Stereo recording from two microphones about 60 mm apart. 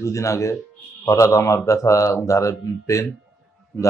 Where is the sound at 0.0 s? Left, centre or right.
Left.